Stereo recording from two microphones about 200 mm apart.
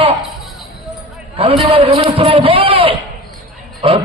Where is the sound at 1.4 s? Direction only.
30° right (ahead or behind).